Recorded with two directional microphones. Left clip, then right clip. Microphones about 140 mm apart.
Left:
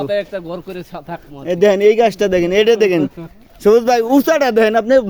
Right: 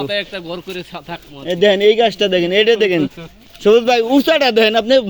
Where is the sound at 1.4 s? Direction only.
10° left (ahead or behind).